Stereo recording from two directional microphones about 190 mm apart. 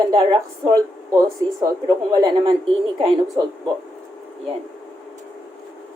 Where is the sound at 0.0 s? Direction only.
20° right (ahead or behind).